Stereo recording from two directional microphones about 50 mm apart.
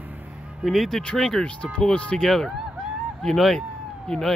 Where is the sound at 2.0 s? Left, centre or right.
Left.